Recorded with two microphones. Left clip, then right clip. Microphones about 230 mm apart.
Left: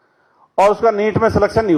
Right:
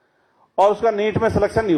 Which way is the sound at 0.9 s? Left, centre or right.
Left.